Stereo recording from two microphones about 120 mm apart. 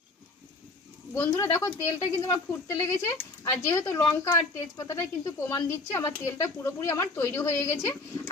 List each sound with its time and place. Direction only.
1.1 s speech: 20° left (ahead or behind)